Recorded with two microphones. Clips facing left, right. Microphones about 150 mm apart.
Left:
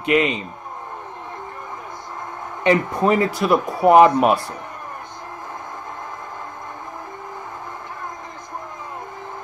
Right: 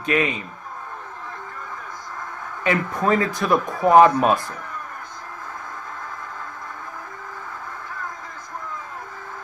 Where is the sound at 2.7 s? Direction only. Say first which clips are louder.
Left 4 dB; 20° left (ahead or behind).